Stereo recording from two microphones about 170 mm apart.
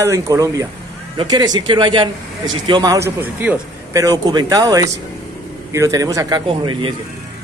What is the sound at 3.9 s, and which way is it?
A man's voice, 20° right (ahead or behind).